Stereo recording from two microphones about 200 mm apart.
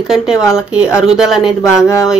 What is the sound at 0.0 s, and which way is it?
Speech, centre (ahead or behind).